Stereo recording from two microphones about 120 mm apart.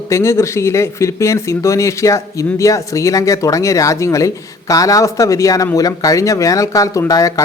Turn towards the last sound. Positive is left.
turn(degrees=30)  # may be behind; listen again after turning